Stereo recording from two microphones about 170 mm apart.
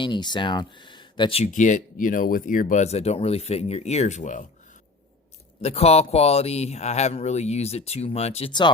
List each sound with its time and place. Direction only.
0.0 s speech: 25° left (ahead or behind)
1.5 s speech: 50° left (ahead or behind)
5.6 s speech: 35° left (ahead or behind)